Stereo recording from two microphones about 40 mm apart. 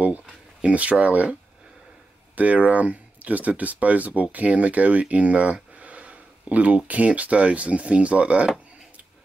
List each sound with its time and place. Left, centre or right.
0.0 s speech: right
2.3 s speech: right